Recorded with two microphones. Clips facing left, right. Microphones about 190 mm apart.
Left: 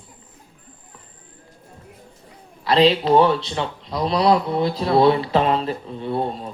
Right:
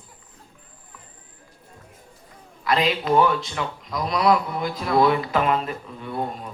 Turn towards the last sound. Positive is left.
turn(degrees=30)  # may be behind; listen again after turning